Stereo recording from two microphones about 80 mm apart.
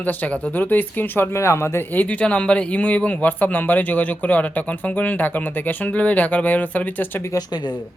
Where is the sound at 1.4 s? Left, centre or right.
Left.